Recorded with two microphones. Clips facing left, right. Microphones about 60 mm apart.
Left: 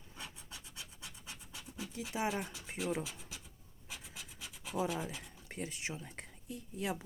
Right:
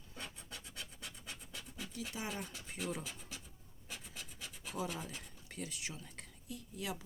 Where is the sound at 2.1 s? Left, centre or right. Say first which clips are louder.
Left 9 dB; left.